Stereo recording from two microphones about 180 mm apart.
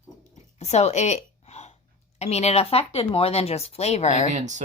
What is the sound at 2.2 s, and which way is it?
Speech, 35° left (ahead or behind).